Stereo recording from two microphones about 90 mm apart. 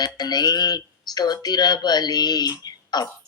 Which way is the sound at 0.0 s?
50° left (ahead or behind).